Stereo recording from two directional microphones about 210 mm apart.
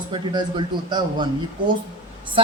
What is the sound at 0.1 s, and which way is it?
Speech, 20° right (ahead or behind).